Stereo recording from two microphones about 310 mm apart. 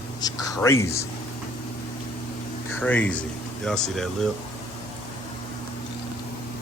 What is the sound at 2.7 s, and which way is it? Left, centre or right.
Speech, centre.